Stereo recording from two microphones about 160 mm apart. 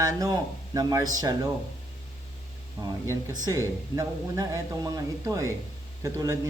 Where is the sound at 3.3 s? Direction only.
20° right (ahead or behind).